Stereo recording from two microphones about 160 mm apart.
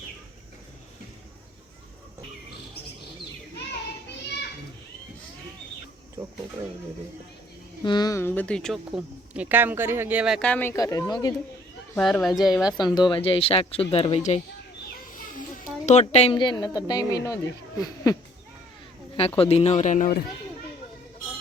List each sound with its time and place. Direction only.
7.9 s speech: 25° left (ahead or behind); by 10.4 s 5° right (ahead or behind)
10.4 s speech: 10° left (ahead or behind)
11.9 s speech: centre (ahead or behind)
12.8 s speech: 25° left (ahead or behind); by 14.4 s 45° left (ahead or behind)
15.6 s speech: 45° left (ahead or behind)
16.3 s speech: 30° left (ahead or behind)
19.4 s speech: 40° left (ahead or behind)